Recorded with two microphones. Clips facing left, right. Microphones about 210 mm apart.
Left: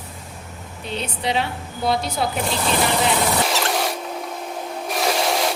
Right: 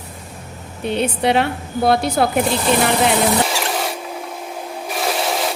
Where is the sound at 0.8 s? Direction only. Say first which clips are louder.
Right 8 dB; 60° right (ahead or behind).